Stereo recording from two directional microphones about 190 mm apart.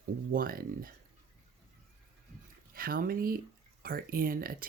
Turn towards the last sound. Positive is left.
turn(degrees=-50)  # may be behind; listen again after turning